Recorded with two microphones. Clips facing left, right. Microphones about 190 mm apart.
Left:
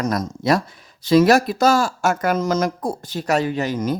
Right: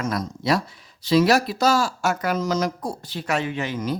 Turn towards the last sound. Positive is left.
turn(degrees=40)  # may be behind; listen again after turning